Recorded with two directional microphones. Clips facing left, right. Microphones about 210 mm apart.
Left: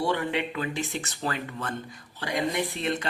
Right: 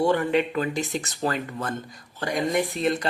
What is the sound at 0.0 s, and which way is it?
Speech, 45° right (ahead or behind).